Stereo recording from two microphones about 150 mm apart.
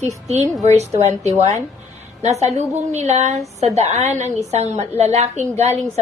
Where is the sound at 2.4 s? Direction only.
50° right (ahead or behind).